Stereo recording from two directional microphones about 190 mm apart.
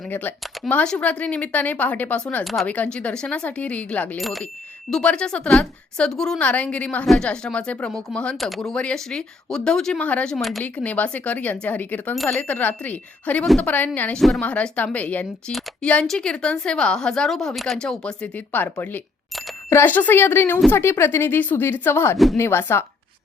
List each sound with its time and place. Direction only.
0.0 s a woman's voice: 10° left (ahead or behind)